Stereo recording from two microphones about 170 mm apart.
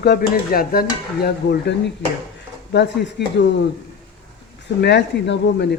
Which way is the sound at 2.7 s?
90° left.